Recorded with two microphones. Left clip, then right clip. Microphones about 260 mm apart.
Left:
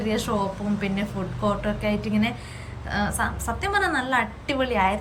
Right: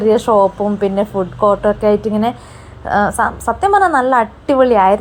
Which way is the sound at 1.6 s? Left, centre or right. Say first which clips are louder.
Right 14 dB; right.